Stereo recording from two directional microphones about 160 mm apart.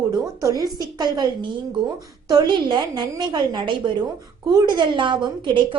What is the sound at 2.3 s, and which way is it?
A woman's voice, 25° right (ahead or behind).